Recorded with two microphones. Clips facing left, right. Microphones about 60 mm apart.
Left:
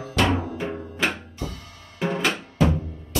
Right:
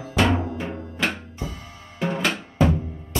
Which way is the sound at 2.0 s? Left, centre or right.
Centre.